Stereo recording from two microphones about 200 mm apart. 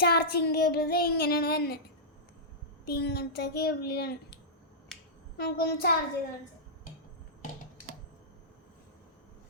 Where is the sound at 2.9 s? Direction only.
55° left (ahead or behind).